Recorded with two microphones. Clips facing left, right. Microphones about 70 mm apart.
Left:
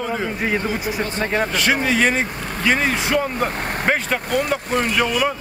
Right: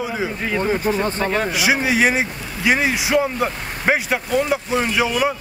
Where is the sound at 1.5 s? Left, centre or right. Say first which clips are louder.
Even; centre.